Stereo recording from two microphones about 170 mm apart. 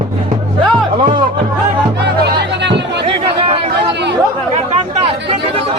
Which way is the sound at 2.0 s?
90° right.